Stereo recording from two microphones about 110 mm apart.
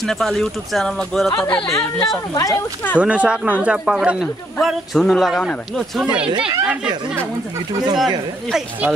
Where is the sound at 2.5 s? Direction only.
15° left (ahead or behind).